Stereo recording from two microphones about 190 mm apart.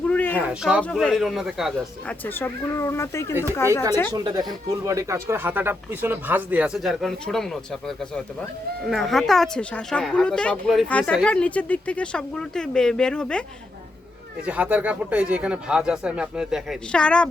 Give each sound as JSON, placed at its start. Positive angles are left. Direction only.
{"t": 0.1, "sound": "a sound", "side_deg": 10}
{"t": 0.4, "sound": "speech", "side_deg": -5}
{"t": 0.8, "sound": "speech", "side_deg": 5}
{"t": 2.2, "sound": "speech", "side_deg": 10}
{"t": 4.1, "sound": "speech", "side_deg": -20}
{"t": 14.4, "sound": "speech", "side_deg": -5}